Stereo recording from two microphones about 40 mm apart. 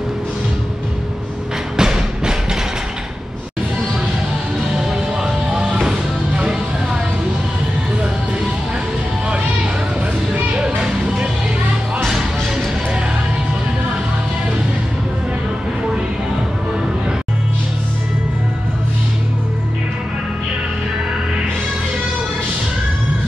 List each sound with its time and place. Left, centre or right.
1.8 s music: centre
4.9 s music: centre
10.6 s music: right